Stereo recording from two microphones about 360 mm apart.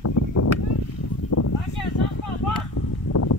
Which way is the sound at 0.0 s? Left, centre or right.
Left.